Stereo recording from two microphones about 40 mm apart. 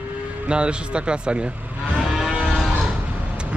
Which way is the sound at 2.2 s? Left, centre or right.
Centre.